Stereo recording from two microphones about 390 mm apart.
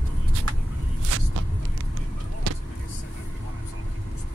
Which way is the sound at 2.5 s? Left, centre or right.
Right.